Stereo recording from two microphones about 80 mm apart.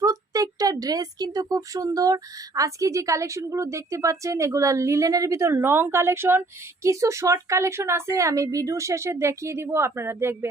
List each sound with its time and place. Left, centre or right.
0.0 s speech: right